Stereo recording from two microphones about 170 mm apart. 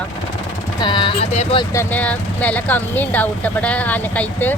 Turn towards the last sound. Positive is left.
turn(degrees=10)  # may be behind; listen again after turning